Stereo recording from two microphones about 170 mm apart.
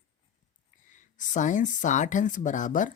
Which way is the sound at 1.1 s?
45° left (ahead or behind).